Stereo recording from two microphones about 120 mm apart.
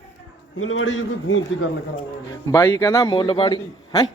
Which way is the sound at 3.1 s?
45° left (ahead or behind).